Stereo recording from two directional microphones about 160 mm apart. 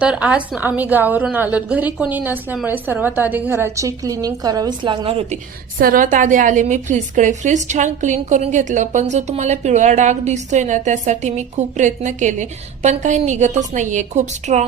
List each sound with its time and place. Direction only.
0.0 s a woman's voice: 5° right (ahead or behind); by 5.4 s 35° right (ahead or behind)
5.8 s a woman's voice: 60° right (ahead or behind)